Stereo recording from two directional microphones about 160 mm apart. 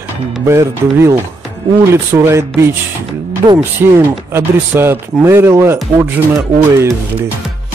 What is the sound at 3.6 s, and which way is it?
Speech, 15° right (ahead or behind).